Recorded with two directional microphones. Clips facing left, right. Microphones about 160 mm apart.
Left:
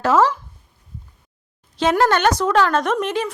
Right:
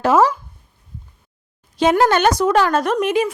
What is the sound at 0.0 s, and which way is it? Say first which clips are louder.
Speech: right 2 dB; 10° right (ahead or behind).